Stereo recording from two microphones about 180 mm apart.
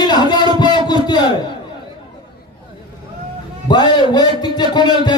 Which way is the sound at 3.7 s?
25° left (ahead or behind).